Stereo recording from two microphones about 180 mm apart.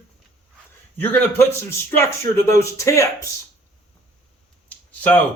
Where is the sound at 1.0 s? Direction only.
10° left (ahead or behind).